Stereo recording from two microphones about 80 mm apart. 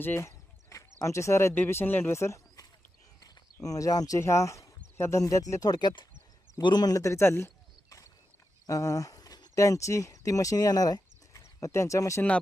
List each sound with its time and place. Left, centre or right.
0.0 s a sound: left
1.0 s speech: left
1.5 s speech: left
2.1 s pigeon: left
3.2 s a sound: left
4.2 s speech: left